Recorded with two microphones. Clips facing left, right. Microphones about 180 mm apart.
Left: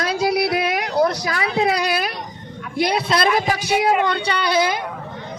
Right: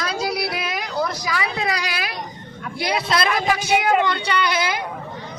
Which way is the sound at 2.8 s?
55° left (ahead or behind).